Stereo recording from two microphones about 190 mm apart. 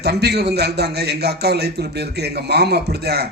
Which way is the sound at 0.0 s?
60° right (ahead or behind).